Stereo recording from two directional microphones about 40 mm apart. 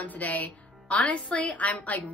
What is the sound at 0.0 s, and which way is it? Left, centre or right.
Speech, left.